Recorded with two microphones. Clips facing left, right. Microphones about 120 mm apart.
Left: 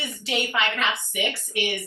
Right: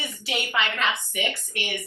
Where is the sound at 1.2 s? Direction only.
15° left (ahead or behind).